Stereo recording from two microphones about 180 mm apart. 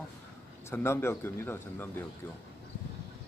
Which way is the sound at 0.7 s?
15° left (ahead or behind).